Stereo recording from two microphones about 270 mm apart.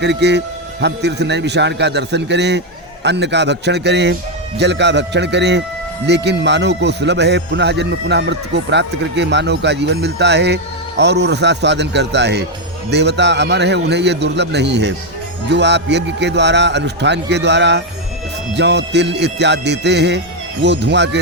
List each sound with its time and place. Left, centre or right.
0.0 s speech: right